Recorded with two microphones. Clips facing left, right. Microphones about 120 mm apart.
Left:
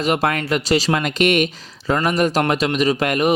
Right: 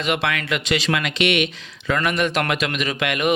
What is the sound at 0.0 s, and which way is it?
Speech, 40° left (ahead or behind).